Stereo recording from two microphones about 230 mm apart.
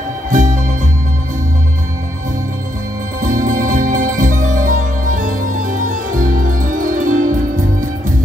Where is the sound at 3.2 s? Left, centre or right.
Right.